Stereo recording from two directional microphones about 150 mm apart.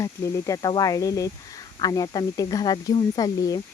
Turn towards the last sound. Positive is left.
turn(degrees=25)  # may be behind; listen again after turning